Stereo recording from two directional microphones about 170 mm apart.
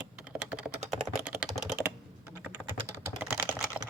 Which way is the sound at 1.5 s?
15° right (ahead or behind).